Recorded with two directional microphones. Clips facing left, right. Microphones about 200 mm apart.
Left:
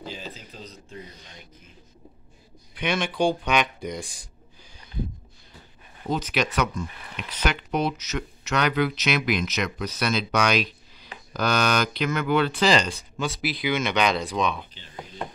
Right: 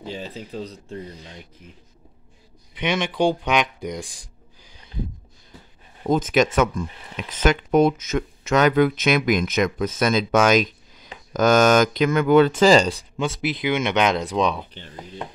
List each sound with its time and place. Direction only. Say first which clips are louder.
0.0 s speech: right 5 dB; 30° right (ahead or behind)
2.8 s speech: right 3 dB; 20° right (ahead or behind)
6.0 s speech: right 7 dB; 45° right (ahead or behind)
13.2 s speech: right 3 dB; 20° right (ahead or behind)
14.4 s speech: right 5 dB; 35° right (ahead or behind)